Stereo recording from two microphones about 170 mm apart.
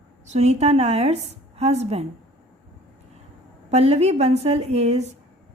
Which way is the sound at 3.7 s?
40° right (ahead or behind).